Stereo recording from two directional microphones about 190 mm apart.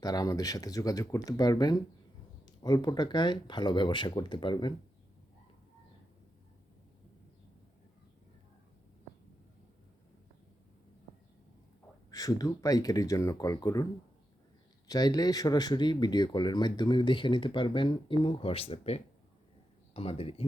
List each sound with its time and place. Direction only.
0.0 s speech: 20° left (ahead or behind)
12.1 s speech: 20° left (ahead or behind)
14.8 s speech: 20° left (ahead or behind)